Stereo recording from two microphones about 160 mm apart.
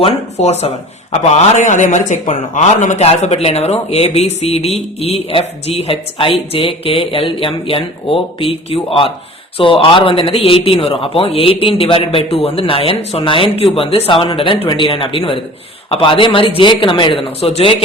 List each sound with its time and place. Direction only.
0.0 s a man's voice: 40° left (ahead or behind)